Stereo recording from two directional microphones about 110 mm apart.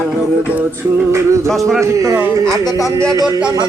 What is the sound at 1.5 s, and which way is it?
Speech, centre (ahead or behind).